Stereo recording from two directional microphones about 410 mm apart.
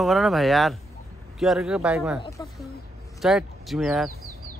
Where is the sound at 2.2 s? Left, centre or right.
Centre.